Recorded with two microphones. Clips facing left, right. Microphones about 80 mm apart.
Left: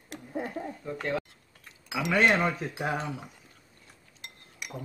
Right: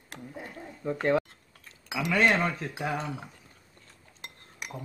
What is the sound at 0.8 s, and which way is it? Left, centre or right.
Speech, right.